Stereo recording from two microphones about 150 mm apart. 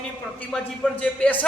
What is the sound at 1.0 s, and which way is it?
Speech, 10° left (ahead or behind).